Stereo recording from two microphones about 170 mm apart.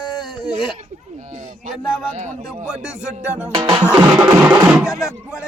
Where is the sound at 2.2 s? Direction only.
45° right (ahead or behind).